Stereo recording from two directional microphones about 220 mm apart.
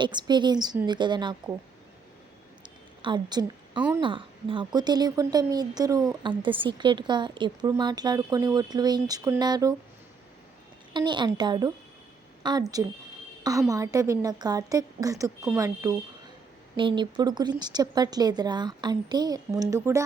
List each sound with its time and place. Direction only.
0.0 s speech: 20° right (ahead or behind)
2.6 s a sound: 20° right (ahead or behind)
3.8 s a woman's voice: 10° right (ahead or behind)
4.0 s speech: 20° right (ahead or behind)
10.9 s a woman's voice: 20° right (ahead or behind)